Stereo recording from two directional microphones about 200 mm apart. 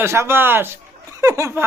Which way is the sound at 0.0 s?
10° right (ahead or behind).